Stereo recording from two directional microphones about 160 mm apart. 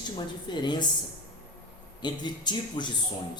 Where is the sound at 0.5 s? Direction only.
30° left (ahead or behind).